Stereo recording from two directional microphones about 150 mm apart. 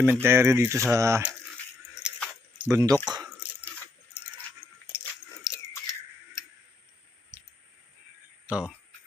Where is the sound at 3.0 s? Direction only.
30° right (ahead or behind).